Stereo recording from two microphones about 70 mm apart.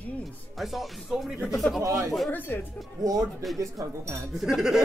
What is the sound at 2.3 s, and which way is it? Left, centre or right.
Speech, left.